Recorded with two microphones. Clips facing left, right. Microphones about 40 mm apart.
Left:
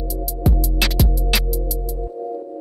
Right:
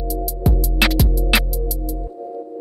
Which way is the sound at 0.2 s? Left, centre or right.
Centre.